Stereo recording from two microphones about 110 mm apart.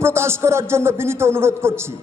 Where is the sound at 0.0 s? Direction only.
25° right (ahead or behind).